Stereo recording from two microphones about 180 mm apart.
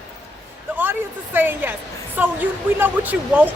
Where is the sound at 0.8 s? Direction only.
10° right (ahead or behind).